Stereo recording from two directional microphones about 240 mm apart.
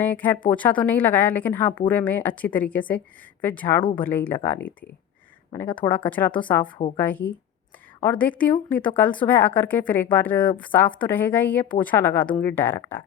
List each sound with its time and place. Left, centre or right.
0.0 s a woman's voice: centre